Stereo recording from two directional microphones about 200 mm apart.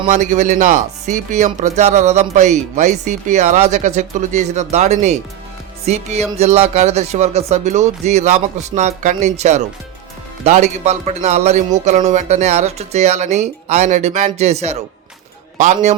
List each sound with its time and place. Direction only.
0.1 s speech: 35° right (ahead or behind)